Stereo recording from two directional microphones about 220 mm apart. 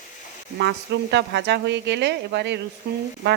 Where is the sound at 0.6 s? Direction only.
50° right (ahead or behind).